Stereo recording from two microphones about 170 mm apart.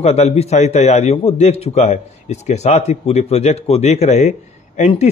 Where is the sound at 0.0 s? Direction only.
40° left (ahead or behind).